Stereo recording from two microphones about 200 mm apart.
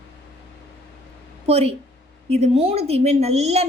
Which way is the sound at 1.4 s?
30° right (ahead or behind).